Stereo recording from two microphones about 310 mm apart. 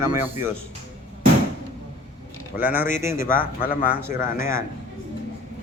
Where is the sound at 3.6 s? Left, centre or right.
Left.